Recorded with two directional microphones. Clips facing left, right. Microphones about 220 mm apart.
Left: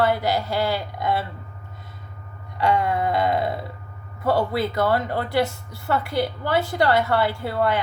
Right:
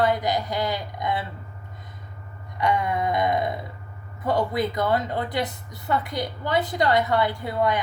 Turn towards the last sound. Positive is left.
turn(degrees=-15)  # may be behind; listen again after turning